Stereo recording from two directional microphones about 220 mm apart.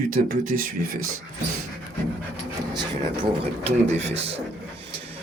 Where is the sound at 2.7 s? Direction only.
20° right (ahead or behind).